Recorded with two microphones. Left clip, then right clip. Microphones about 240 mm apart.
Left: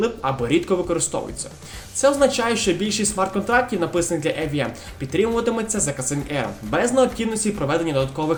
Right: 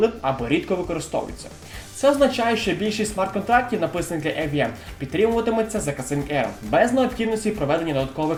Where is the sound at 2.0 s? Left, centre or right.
Left.